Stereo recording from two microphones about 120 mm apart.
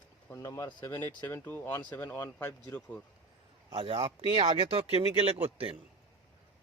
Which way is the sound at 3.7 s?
50° right (ahead or behind).